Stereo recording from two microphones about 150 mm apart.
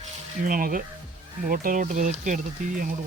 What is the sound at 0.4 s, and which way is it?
Speech, 65° right (ahead or behind).